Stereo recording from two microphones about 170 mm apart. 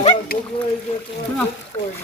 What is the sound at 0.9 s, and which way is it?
Speech, 35° left (ahead or behind).